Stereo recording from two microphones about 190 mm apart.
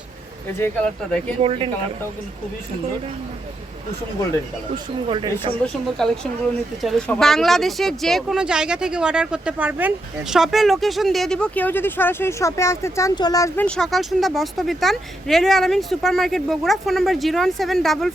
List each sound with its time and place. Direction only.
0.6 s speech: 5° left (ahead or behind)
1.4 s speech: 30° right (ahead or behind)
4.7 s speech: 25° right (ahead or behind)
5.6 s speech: 5° left (ahead or behind)
13.7 s speech: centre (ahead or behind)